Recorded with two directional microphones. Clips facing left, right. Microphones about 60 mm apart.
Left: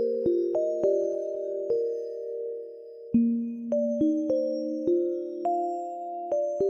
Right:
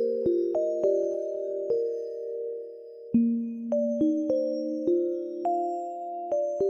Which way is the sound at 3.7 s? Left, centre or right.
Centre.